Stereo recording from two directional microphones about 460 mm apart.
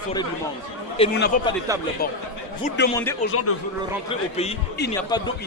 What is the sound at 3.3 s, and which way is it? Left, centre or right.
Speech, left.